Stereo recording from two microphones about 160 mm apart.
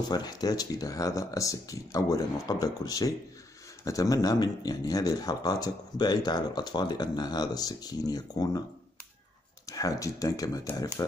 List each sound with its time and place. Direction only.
0.1 s speech: 25° left (ahead or behind)
9.7 s speech: 20° left (ahead or behind)